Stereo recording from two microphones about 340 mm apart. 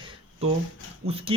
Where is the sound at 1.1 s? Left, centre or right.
Centre.